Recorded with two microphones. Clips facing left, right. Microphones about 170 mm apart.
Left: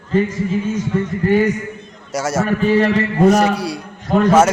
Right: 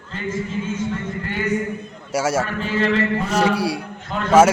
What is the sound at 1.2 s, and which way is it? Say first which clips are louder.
Speech: left 13 dB; 45° left (ahead or behind).